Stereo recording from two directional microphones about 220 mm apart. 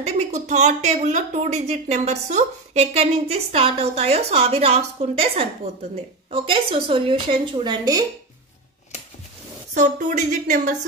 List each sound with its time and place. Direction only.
0.0 s a woman's voice: 30° right (ahead or behind)
9.8 s a woman's voice: 35° right (ahead or behind)